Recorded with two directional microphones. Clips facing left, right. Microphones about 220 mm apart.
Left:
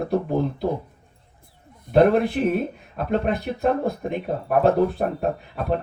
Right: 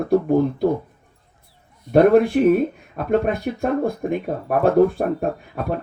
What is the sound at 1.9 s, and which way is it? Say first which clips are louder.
Speech: right 3 dB; 50° left (ahead or behind).